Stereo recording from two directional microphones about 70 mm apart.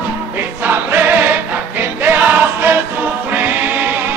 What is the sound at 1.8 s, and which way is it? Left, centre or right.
Music, right.